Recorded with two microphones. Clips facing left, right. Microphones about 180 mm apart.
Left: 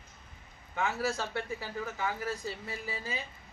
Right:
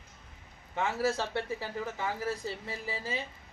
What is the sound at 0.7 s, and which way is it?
A man's voice, 30° right (ahead or behind).